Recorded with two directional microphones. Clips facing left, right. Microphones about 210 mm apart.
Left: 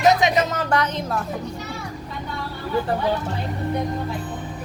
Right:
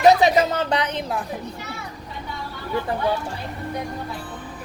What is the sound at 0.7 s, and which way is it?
Speech, 15° right (ahead or behind).